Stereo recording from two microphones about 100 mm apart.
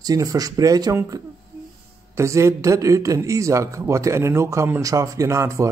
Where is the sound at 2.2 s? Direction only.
30° right (ahead or behind).